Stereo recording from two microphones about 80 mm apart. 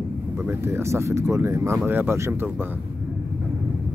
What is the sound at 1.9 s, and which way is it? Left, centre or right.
Speech, right.